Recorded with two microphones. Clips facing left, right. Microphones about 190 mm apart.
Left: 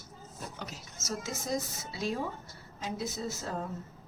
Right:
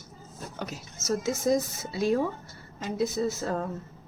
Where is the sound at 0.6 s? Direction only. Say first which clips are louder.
Right 7 dB; 55° right (ahead or behind).